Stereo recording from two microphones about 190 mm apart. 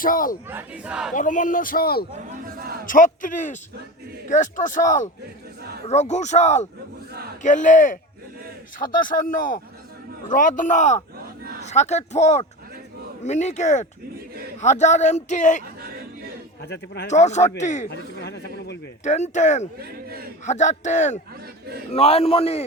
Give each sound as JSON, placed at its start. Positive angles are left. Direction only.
{"t": 0.0, "sound": "a man's voice", "side_deg": 45}
{"t": 0.4, "sound": "battle cry", "side_deg": -10}
{"t": 1.1, "sound": "a man's voice", "side_deg": 45}
{"t": 2.1, "sound": "a man's voice", "side_deg": -45}
{"t": 2.8, "sound": "a man's voice", "side_deg": 45}
{"t": 7.1, "sound": "a sound", "side_deg": -55}
{"t": 7.4, "sound": "a man's voice", "side_deg": 40}
{"t": 15.6, "sound": "a sound", "side_deg": -50}
{"t": 16.6, "sound": "speech", "side_deg": 65}
{"t": 17.1, "sound": "speech", "side_deg": 35}
{"t": 17.8, "sound": "speech", "side_deg": 60}
{"t": 19.0, "sound": "speech", "side_deg": 40}
{"t": 19.8, "sound": "a man's voice", "side_deg": -50}
{"t": 20.4, "sound": "speech", "side_deg": 40}